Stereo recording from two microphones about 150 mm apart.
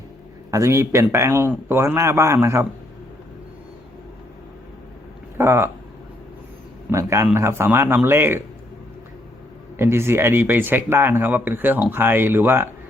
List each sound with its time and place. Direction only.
0.5 s speech: 20° right (ahead or behind)
5.4 s speech: 15° right (ahead or behind)
6.9 s speech: 20° right (ahead or behind)
9.7 s speech: 15° right (ahead or behind)